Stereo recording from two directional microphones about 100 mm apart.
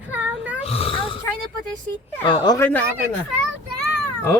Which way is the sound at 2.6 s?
15° left (ahead or behind).